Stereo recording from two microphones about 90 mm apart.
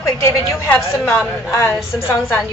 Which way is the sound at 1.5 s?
30° left (ahead or behind).